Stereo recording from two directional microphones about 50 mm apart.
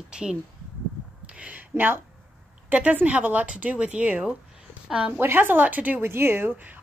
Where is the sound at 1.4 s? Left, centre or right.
Right.